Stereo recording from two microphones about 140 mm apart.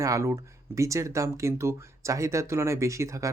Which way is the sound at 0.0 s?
20° right (ahead or behind).